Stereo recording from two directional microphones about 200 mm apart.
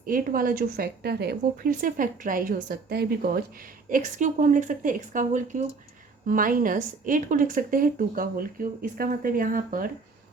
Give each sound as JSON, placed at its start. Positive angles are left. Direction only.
{"t": 0.0, "sound": "a woman's voice", "side_deg": -45}